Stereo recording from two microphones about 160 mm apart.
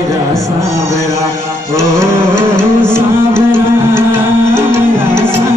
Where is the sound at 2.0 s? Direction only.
15° right (ahead or behind).